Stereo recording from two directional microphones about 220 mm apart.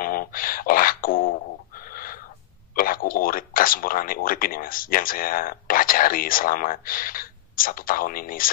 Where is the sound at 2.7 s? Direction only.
40° left (ahead or behind).